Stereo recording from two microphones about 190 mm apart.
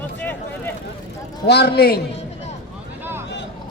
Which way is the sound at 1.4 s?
60° left (ahead or behind).